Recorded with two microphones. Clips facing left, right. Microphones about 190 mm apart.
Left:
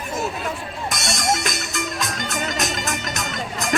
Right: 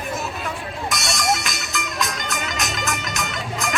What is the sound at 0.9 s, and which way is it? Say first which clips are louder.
Music: even; 50° left (ahead or behind).